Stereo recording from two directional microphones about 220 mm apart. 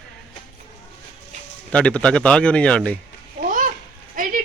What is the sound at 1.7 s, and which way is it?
Speech, 5° left (ahead or behind).